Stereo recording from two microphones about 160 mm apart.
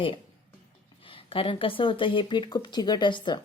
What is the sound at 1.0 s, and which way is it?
Speech, 35° left (ahead or behind).